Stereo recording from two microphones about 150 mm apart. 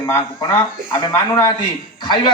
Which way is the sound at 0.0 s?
20° left (ahead or behind).